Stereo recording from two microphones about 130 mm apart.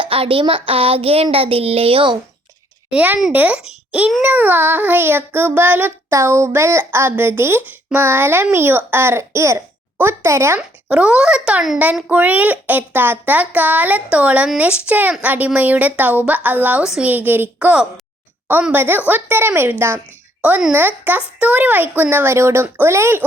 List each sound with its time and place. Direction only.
0.0 s child singing: 45° right (ahead or behind)
2.9 s a child's voice: 15° right (ahead or behind)
10.6 s a child's voice: 10° right (ahead or behind)